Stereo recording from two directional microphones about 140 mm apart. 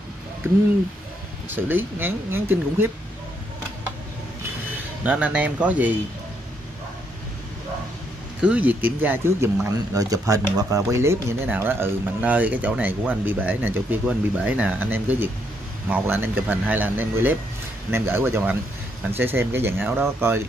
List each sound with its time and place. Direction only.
1.5 s speech: 15° right (ahead or behind)
5.0 s speech: 10° right (ahead or behind)
8.4 s speech: 10° right (ahead or behind)